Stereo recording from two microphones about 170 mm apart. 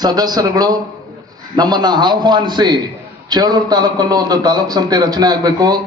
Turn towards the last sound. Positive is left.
turn(degrees=-25)  # may be behind; listen again after turning